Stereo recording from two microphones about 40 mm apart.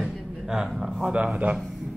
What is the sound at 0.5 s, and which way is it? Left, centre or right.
Speech, centre.